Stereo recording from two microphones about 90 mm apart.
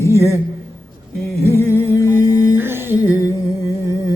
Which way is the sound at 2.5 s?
25° right (ahead or behind).